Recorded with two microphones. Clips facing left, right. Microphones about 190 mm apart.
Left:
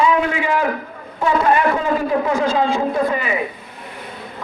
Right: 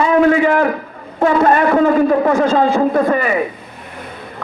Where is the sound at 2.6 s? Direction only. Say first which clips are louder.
Right 5 dB; 50° right (ahead or behind).